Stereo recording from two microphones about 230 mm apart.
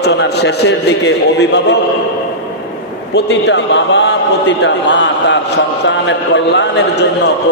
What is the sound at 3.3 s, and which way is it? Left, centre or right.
A man's voice, left.